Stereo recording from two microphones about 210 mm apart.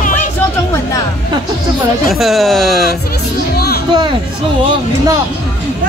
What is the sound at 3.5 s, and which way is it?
Music, 50° left (ahead or behind).